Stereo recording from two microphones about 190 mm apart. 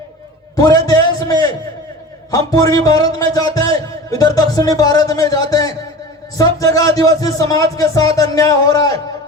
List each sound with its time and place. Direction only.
0.5 s a man's voice: 20° left (ahead or behind)